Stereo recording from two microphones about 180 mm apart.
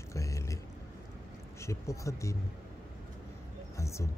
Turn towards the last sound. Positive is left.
turn(degrees=15)  # may be behind; listen again after turning